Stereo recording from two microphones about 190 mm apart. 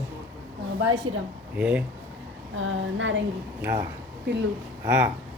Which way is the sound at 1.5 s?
5° right (ahead or behind).